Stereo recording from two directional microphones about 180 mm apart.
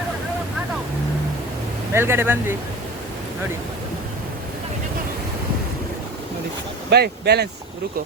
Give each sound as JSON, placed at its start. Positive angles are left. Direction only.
{"t": 1.9, "sound": "speech", "side_deg": -15}
{"t": 6.9, "sound": "speech", "side_deg": -65}